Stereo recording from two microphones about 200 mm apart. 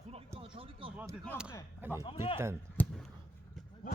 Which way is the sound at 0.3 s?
25° right (ahead or behind).